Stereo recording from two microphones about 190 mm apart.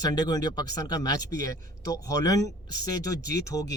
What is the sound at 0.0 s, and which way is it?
Speech, 20° left (ahead or behind).